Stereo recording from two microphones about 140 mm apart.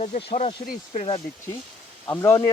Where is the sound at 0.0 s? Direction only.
55° left (ahead or behind).